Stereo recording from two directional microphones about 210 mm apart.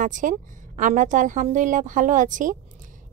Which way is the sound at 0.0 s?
40° right (ahead or behind).